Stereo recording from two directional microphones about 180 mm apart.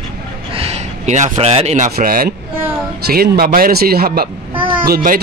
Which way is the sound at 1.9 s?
55° right (ahead or behind).